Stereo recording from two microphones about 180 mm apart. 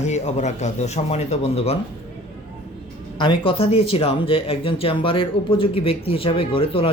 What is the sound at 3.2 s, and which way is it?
Speech, 25° left (ahead or behind).